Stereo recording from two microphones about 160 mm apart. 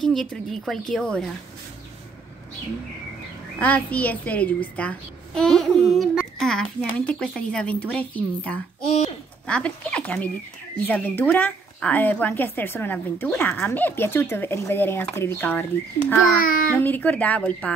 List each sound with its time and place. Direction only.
0.0 s a woman's voice: centre (ahead or behind)
3.5 s a woman's voice: 10° left (ahead or behind)
16.4 s speech: 60° left (ahead or behind)
16.7 s speech: 10° left (ahead or behind)